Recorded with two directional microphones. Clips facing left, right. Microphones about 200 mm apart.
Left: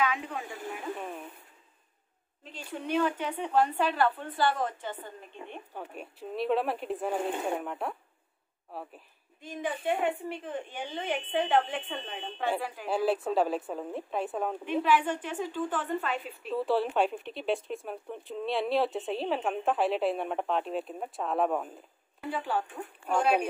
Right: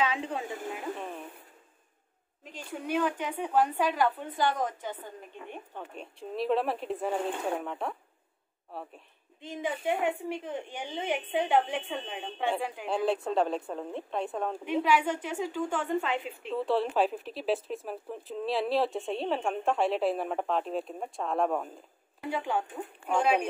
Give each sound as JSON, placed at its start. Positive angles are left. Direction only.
{"t": 0.0, "sound": "speech", "side_deg": -30}
{"t": 0.9, "sound": "radio", "side_deg": 0}
{"t": 2.4, "sound": "a woman's voice", "side_deg": -10}
{"t": 5.8, "sound": "speech", "side_deg": 5}
{"t": 9.4, "sound": "a woman's voice", "side_deg": -20}
{"t": 12.8, "sound": "speech", "side_deg": 5}
{"t": 14.6, "sound": "a woman's voice", "side_deg": -10}
{"t": 16.5, "sound": "speech", "side_deg": 0}
{"t": 22.3, "sound": "a woman's voice", "side_deg": -15}